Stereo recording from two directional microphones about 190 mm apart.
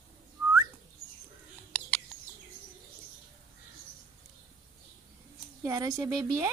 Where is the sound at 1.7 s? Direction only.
10° left (ahead or behind).